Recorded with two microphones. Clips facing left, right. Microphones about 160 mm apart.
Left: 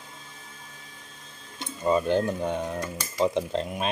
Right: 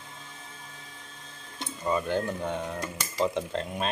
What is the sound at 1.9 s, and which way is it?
Cutlery, 20° left (ahead or behind).